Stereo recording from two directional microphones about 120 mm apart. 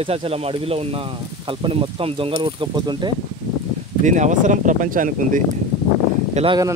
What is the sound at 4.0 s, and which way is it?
Speech, 90° right.